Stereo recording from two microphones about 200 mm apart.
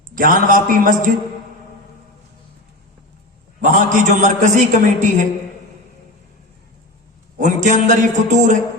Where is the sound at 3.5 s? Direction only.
40° right (ahead or behind).